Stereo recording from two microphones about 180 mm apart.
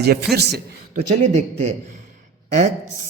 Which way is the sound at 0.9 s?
40° right (ahead or behind).